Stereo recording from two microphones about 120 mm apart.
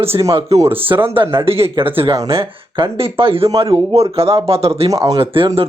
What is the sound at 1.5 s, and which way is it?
Speech, 55° right (ahead or behind).